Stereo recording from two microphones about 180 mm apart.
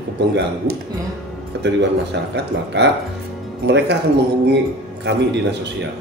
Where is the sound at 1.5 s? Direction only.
70° right (ahead or behind).